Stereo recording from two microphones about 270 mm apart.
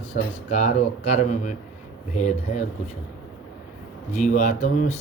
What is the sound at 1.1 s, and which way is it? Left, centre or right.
Speech, left.